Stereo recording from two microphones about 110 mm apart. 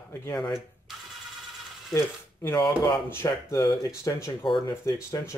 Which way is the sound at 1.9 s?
30° left (ahead or behind).